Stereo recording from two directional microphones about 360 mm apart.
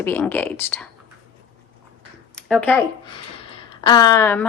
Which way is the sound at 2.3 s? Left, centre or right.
Centre.